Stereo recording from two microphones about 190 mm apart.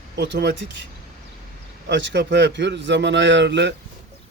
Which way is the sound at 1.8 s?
65° right (ahead or behind).